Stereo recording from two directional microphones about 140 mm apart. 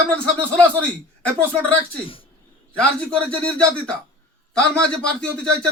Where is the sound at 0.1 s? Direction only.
10° left (ahead or behind).